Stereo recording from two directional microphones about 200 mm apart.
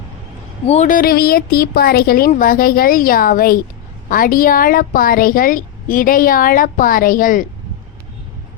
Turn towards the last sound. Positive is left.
turn(degrees=45)  # may be behind; listen again after turning